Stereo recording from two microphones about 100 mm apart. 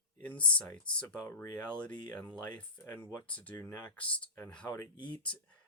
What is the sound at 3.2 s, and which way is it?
Speech, 15° left (ahead or behind).